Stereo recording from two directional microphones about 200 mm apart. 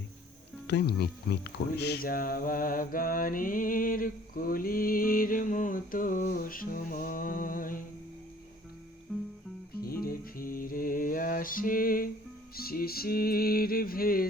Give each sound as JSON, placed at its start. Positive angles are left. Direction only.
{"t": 0.7, "sound": "speech", "side_deg": 55}
{"t": 9.1, "sound": "music", "side_deg": -5}
{"t": 10.0, "sound": "speech", "side_deg": 45}